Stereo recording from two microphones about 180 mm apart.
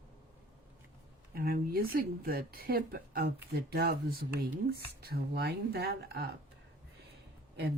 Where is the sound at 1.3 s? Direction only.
55° right (ahead or behind).